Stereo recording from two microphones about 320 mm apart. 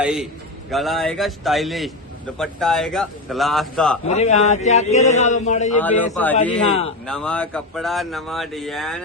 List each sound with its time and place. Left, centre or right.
0.0 s speech: centre
4.0 s a man's voice: left
5.8 s speech: centre